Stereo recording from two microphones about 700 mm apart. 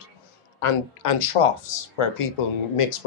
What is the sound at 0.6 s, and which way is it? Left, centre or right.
Speech, left.